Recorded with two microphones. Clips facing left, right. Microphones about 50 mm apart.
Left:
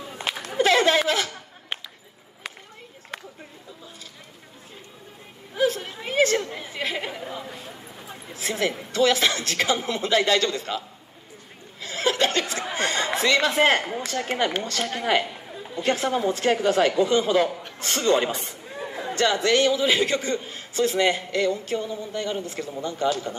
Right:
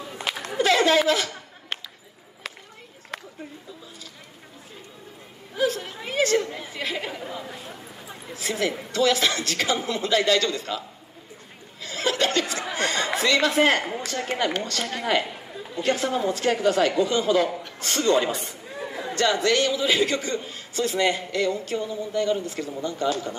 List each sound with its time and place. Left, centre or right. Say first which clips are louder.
0.6 s a sound: left 1 dB; left
1.0 s speech: right 1 dB; left
5.6 s speech: left 1 dB; left
8.4 s speech: even; left
11.8 s a woman's voice: left 1 dB; left